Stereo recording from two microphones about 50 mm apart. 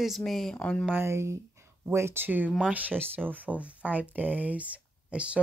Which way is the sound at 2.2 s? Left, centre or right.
Right.